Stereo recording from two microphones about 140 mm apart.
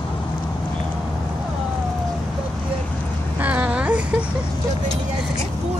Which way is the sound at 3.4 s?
10° right (ahead or behind).